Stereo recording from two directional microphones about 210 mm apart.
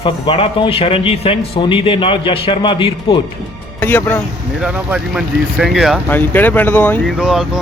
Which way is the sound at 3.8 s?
10° left (ahead or behind).